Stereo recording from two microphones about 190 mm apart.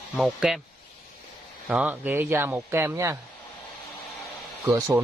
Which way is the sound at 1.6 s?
5° right (ahead or behind).